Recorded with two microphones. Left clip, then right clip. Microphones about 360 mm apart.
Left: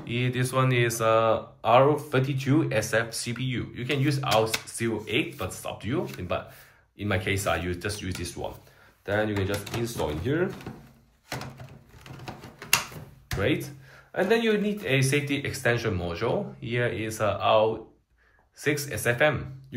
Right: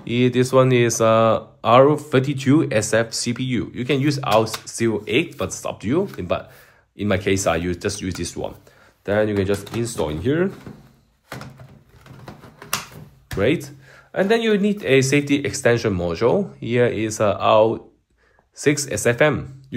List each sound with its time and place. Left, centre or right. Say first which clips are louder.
0.0 s speech: right 11 dB; centre
13.4 s speech: right 7 dB; centre